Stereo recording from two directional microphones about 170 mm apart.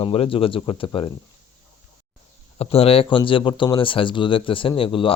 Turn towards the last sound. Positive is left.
turn(degrees=30)  # may be behind; listen again after turning